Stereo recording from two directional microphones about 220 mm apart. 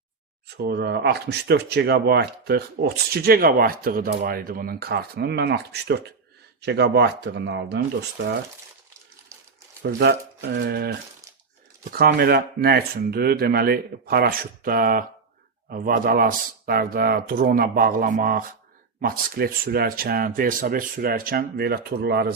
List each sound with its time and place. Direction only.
0.4 s speech: 50° right (ahead or behind)
9.8 s speech: 45° right (ahead or behind)
11.9 s speech: 45° right (ahead or behind)